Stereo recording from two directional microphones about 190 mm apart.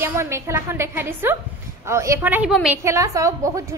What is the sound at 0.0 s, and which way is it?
A woman's voice, 15° right (ahead or behind).